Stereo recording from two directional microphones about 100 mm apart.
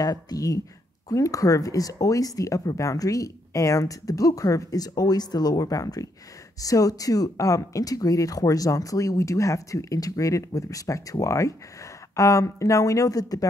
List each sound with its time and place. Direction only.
0.0 s speech: 40° left (ahead or behind)